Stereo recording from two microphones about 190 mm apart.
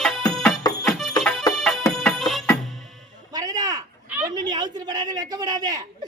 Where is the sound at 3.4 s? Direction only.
20° right (ahead or behind).